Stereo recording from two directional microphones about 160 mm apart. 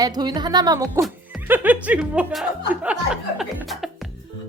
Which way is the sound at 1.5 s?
10° right (ahead or behind).